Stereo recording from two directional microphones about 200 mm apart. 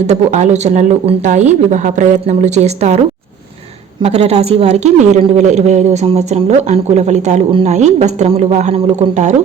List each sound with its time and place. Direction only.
0.1 s a woman's voice: 35° right (ahead or behind)
4.0 s a woman's voice: 30° right (ahead or behind)